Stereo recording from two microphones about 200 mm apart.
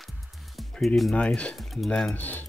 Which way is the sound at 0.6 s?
Centre (ahead or behind).